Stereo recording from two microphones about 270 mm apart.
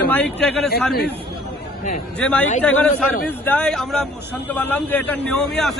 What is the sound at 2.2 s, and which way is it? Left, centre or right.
A man's voice, centre.